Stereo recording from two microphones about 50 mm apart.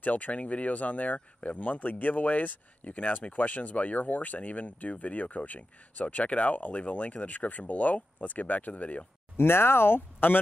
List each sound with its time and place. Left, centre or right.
0.0 s speech: left
9.4 s speech: left